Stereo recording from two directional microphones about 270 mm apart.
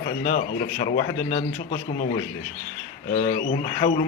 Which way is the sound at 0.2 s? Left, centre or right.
Left.